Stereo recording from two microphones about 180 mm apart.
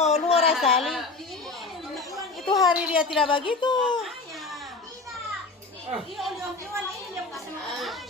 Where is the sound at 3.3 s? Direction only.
30° left (ahead or behind).